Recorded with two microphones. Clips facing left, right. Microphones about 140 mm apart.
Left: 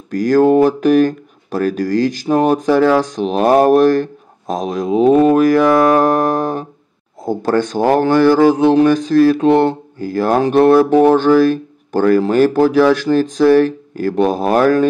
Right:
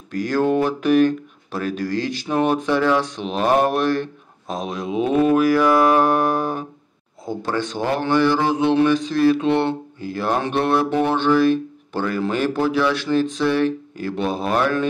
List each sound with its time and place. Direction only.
0.1 s speech: 40° left (ahead or behind)